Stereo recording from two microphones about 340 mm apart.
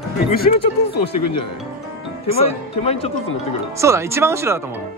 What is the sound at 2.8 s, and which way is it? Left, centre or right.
Speech, centre.